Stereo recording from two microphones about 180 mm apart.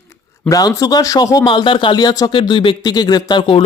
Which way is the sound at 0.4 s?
20° left (ahead or behind).